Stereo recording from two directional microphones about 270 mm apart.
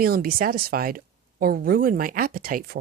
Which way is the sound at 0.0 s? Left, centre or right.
Right.